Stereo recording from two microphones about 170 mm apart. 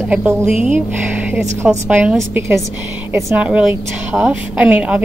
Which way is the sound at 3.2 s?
5° right (ahead or behind).